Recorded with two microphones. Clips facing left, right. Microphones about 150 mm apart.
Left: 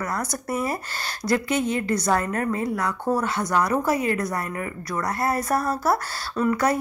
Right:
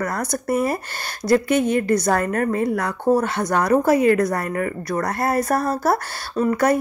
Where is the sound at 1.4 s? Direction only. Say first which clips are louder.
Right 5 dB; 55° right (ahead or behind).